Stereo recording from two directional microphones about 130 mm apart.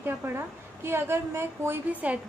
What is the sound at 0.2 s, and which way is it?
A woman's voice, 15° right (ahead or behind).